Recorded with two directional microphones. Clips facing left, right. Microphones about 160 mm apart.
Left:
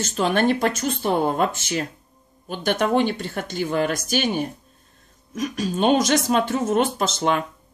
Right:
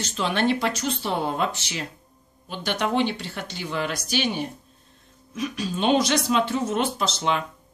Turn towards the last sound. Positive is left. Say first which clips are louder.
# left 3 dB
turn(degrees=50)  # may be behind; listen again after turning